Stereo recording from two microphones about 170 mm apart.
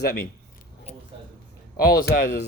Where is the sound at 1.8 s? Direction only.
60° left (ahead or behind).